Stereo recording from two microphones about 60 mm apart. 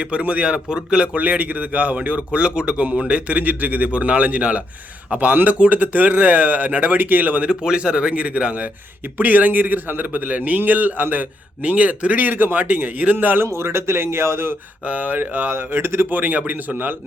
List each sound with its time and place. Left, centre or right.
0.0 s a man's voice: centre
1.1 s a man's voice: right
7.6 s a man's voice: centre; by 13.5 s right
13.5 s speech: right
14.8 s speech: right